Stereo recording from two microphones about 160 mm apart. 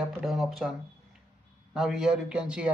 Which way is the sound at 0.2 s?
Centre (ahead or behind).